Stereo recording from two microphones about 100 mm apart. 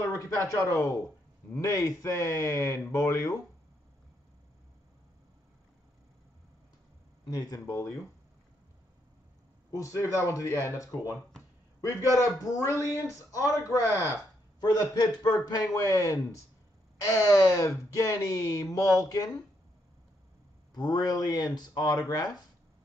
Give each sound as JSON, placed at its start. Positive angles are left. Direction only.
{"t": 0.5, "sound": "speech", "side_deg": 30}
{"t": 7.2, "sound": "a man's voice", "side_deg": 40}
{"t": 9.7, "sound": "a man's voice", "side_deg": 35}
{"t": 12.2, "sound": "a man's voice", "side_deg": 30}
{"t": 20.7, "sound": "a man's voice", "side_deg": 45}